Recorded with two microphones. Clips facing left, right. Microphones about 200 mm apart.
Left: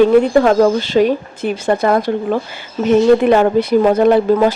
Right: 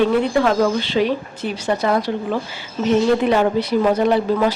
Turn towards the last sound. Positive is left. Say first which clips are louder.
# left 6 dB
turn(degrees=50)  # may be behind; listen again after turning